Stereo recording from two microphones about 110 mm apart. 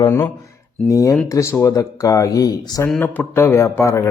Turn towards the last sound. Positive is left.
turn(degrees=25)  # may be behind; listen again after turning